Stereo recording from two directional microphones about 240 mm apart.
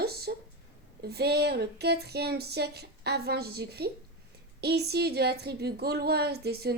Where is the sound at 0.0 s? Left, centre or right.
Right.